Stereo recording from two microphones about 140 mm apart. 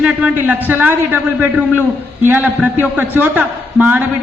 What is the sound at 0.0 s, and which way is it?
A man's voice, 10° right (ahead or behind).